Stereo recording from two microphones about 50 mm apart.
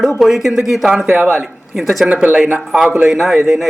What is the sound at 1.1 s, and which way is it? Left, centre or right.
Speech, right.